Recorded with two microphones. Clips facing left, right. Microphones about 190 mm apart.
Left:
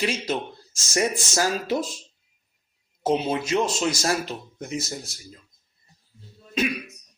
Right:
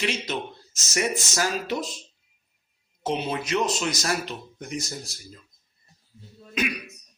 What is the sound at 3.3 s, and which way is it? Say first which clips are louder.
Speech: left 2 dB; 25° left (ahead or behind).